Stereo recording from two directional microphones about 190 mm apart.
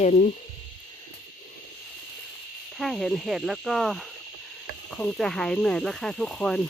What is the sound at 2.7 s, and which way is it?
Speech, centre (ahead or behind).